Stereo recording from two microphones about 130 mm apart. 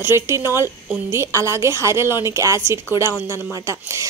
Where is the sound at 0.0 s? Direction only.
20° right (ahead or behind).